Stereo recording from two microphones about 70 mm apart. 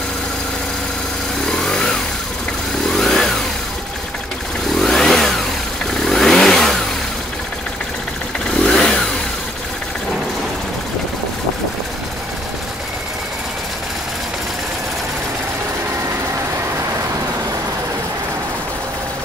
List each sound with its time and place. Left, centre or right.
1.4 s motorcycle: centre
4.7 s vehicle: centre
8.5 s vehicle: centre